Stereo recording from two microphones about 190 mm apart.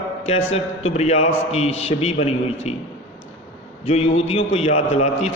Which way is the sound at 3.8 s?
35° left (ahead or behind).